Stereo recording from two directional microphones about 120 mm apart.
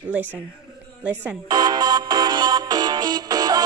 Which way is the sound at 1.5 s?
35° right (ahead or behind).